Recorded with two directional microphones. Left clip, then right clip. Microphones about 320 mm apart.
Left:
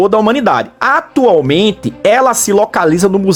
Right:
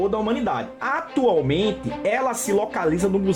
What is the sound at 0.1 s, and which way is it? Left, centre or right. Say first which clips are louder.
A woman's voice: left 13 dB; centre.